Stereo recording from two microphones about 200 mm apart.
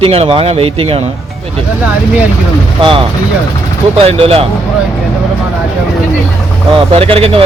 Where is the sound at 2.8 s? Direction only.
25° right (ahead or behind).